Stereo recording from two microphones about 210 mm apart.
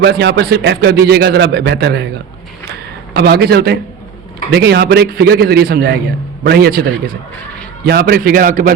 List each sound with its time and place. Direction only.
0.0 s speech: 55° right (ahead or behind)
3.2 s speech: 50° right (ahead or behind)